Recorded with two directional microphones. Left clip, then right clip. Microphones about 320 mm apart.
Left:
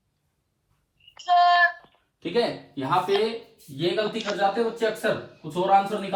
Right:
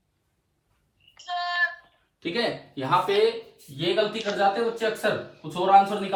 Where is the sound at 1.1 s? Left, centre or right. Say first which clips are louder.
Left 10 dB; centre.